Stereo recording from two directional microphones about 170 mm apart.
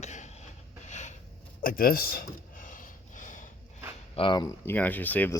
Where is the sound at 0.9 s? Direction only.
45° left (ahead or behind).